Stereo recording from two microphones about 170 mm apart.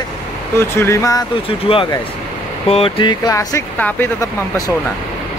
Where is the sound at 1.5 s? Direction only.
30° left (ahead or behind).